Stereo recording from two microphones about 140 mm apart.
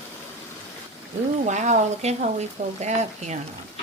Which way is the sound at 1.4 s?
60° right (ahead or behind).